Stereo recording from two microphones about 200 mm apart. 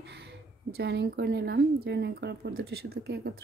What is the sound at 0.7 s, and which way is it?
Speech, 60° right (ahead or behind).